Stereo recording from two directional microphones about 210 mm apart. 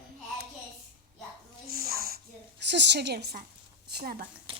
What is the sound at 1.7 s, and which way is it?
Dog, 45° right (ahead or behind).